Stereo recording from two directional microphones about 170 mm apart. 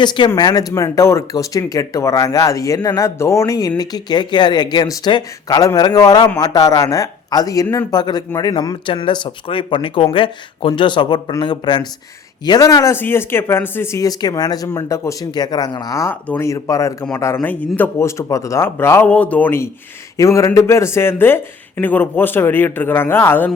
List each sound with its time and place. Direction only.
0.0 s speech: 25° left (ahead or behind)